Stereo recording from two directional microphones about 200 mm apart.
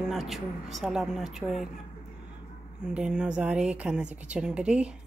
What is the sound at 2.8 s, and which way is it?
A woman's voice, 5° right (ahead or behind).